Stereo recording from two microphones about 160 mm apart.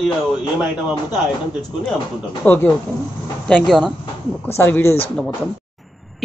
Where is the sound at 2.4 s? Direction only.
10° left (ahead or behind).